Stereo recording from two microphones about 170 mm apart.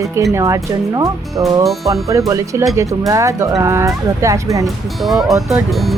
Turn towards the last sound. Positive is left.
turn(degrees=0)  # may be behind; listen again after turning